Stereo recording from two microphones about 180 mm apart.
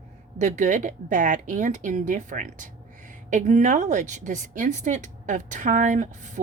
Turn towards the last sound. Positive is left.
turn(degrees=-40)  # may be behind; listen again after turning